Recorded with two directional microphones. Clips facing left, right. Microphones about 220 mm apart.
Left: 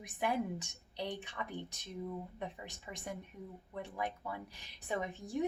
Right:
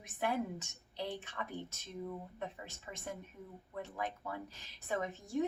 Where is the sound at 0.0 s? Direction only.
15° left (ahead or behind).